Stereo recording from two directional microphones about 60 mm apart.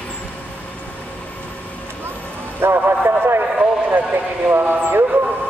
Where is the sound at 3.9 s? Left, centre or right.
Right.